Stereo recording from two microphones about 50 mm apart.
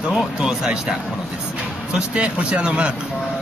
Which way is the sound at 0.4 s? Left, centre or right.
Centre.